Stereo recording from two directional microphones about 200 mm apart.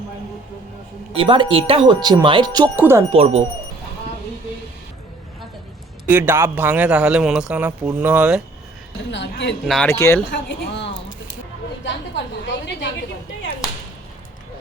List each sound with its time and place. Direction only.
1.1 s speech: 25° right (ahead or behind)
3.1 s speech: 30° right (ahead or behind)
6.1 s a man's voice: 10° right (ahead or behind)
9.0 s a woman's voice: 60° left (ahead or behind)
9.6 s speech: 5° left (ahead or behind)
9.9 s speech: 15° left (ahead or behind)
10.3 s a woman's voice: 60° left (ahead or behind)
12.5 s a woman's voice: 60° left (ahead or behind)